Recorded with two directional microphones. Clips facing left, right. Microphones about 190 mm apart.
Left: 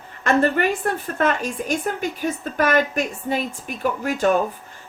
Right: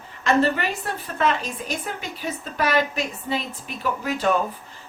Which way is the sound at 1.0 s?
50° left (ahead or behind).